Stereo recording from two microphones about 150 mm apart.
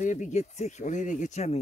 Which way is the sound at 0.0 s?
55° left (ahead or behind).